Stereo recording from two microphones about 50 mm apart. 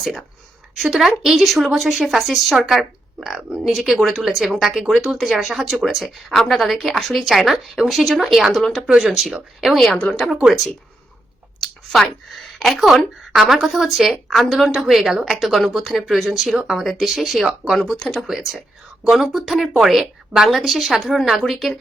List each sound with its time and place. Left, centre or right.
0.8 s speech: centre
2.6 s speech: centre
8.9 s speech: centre
9.6 s speech: centre
10.0 s speech: centre
11.6 s a sound: centre
13.5 s speech: centre
18.3 s speech: centre
19.5 s speech: centre